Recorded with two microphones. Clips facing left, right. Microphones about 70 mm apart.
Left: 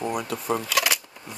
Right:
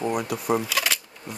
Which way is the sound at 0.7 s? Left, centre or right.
Centre.